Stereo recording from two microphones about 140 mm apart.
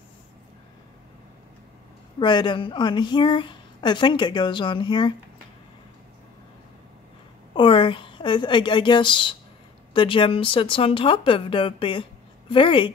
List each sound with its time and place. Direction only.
2.1 s speech: 35° left (ahead or behind)
7.5 s a woman's voice: 40° left (ahead or behind)